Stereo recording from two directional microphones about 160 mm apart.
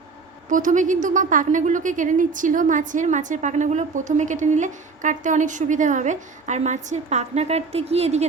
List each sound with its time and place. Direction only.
0.5 s a woman's voice: 55° right (ahead or behind)